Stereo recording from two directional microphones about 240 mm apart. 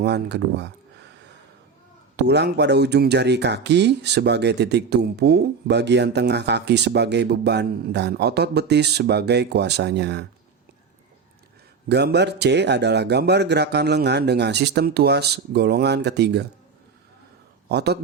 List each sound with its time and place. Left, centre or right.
0.0 s speech: right
2.1 s speech: right
11.9 s speech: right
17.7 s a man's voice: right